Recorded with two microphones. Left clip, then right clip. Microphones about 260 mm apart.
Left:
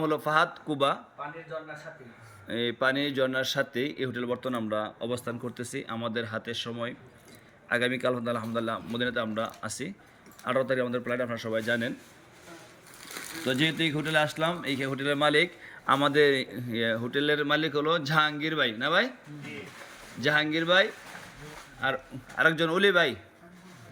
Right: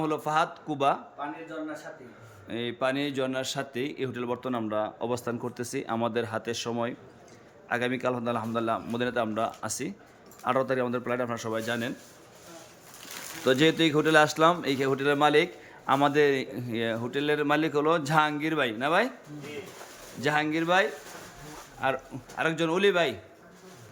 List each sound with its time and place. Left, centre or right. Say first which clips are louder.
0.0 s speech: left 1 dB; centre
2.5 s speech: left 2 dB; centre
13.4 s speech: right 5 dB; centre
20.2 s speech: left 1 dB; centre